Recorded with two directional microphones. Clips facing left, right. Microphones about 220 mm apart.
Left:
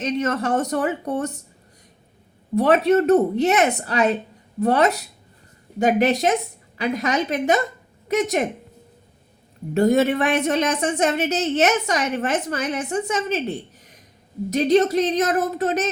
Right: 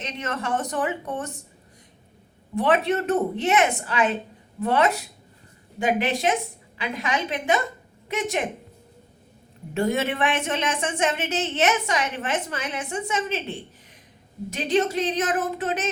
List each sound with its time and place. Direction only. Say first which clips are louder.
0.0 s a woman's voice: left 8 dB; 40° left (ahead or behind)
2.6 s a woman's voice: left 6 dB; 40° left (ahead or behind)
9.7 s a woman's voice: left 7 dB; 40° left (ahead or behind)